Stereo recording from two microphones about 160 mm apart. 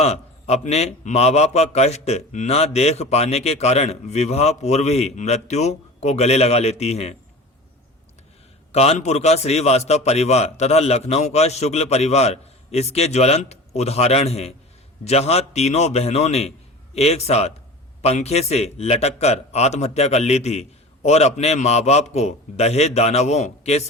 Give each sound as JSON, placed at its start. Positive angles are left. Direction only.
{"t": 0.0, "sound": "a man's voice", "side_deg": 40}
{"t": 8.7, "sound": "a man's voice", "side_deg": 40}